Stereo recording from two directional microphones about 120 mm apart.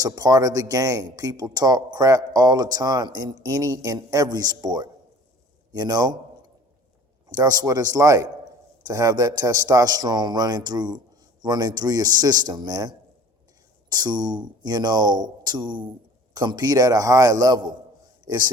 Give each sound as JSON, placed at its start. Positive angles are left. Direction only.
{"t": 0.0, "sound": "speech", "side_deg": -30}
{"t": 7.3, "sound": "speech", "side_deg": -30}
{"t": 13.9, "sound": "speech", "side_deg": -35}